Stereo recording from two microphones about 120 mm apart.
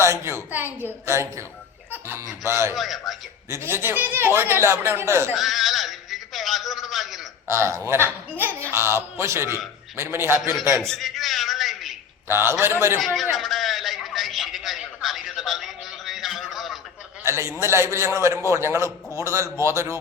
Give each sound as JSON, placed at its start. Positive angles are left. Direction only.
{"t": 0.0, "sound": "a man's voice", "side_deg": -20}
{"t": 1.9, "sound": "laughter", "side_deg": -20}
{"t": 2.5, "sound": "a man's voice", "side_deg": -20}
{"t": 2.7, "sound": "a man's voice", "side_deg": 0}
{"t": 3.5, "sound": "a man's voice", "side_deg": -20}
{"t": 5.3, "sound": "a sound", "side_deg": 0}
{"t": 7.4, "sound": "a man's voice", "side_deg": -20}
{"t": 10.8, "sound": "a sound", "side_deg": 0}
{"t": 12.3, "sound": "a man's voice", "side_deg": -20}
{"t": 13.0, "sound": "a man's voice", "side_deg": 0}
{"t": 13.3, "sound": "a sound", "side_deg": 0}
{"t": 17.2, "sound": "a man's voice", "side_deg": -20}